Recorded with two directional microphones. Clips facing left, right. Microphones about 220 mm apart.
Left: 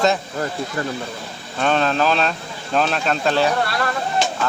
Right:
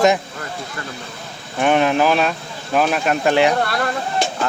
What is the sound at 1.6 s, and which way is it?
Speech, 15° right (ahead or behind).